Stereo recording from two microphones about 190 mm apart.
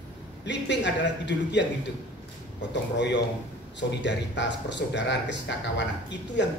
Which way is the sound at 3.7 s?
70° left (ahead or behind).